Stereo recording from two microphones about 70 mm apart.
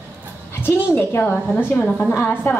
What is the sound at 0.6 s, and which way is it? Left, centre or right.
A child's voice, left.